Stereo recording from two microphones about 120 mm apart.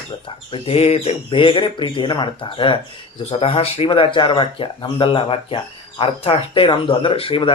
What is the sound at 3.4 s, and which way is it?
Speech, 55° left (ahead or behind).